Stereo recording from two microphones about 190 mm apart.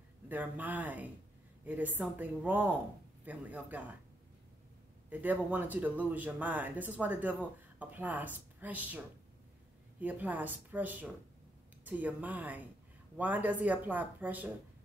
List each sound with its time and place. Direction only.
0.3 s speech: 10° right (ahead or behind)
5.1 s speech: 10° right (ahead or behind)